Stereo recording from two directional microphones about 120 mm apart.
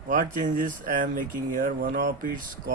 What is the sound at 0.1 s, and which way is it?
Speech, 90° right.